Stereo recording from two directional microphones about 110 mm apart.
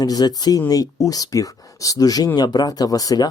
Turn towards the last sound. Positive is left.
turn(degrees=35)  # may be behind; listen again after turning